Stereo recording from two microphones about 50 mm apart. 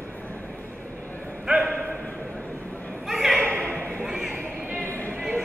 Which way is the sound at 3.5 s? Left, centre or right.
Right.